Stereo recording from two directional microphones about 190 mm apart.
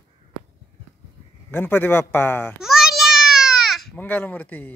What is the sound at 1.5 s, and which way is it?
Speech, 10° left (ahead or behind).